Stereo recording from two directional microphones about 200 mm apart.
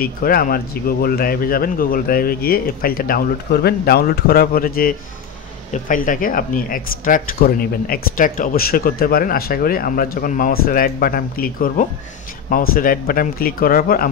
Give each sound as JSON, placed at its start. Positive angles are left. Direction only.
{"t": 0.0, "sound": "speech", "side_deg": 45}